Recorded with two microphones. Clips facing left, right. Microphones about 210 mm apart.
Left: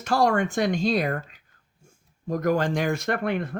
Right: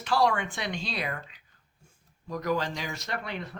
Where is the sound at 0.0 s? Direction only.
45° left (ahead or behind).